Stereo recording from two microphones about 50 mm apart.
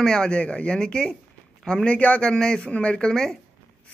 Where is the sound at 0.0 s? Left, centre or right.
Centre.